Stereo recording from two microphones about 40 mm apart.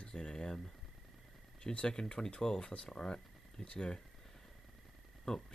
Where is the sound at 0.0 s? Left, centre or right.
Centre.